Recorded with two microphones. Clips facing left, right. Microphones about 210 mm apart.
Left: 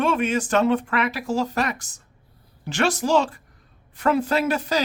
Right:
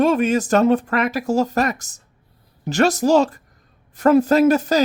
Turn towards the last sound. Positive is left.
turn(degrees=-45)  # may be behind; listen again after turning